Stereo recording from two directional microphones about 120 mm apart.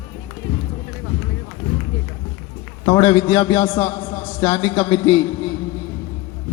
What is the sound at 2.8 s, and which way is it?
A man's voice, 35° left (ahead or behind).